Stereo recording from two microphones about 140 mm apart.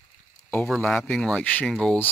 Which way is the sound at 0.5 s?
5° left (ahead or behind).